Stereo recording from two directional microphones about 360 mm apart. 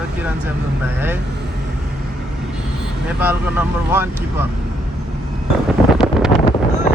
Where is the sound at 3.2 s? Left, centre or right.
Centre.